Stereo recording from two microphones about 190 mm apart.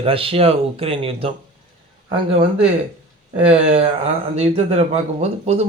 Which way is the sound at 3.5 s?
35° right (ahead or behind).